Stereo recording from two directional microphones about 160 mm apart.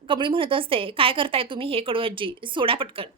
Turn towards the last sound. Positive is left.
turn(degrees=-35)  # may be behind; listen again after turning